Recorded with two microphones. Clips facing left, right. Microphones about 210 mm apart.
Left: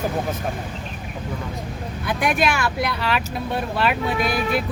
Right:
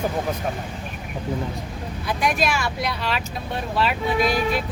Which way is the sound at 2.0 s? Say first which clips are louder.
Left 2 dB; 60° left (ahead or behind).